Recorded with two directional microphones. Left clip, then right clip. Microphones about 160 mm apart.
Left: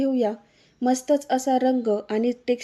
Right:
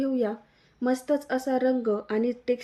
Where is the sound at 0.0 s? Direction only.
25° left (ahead or behind).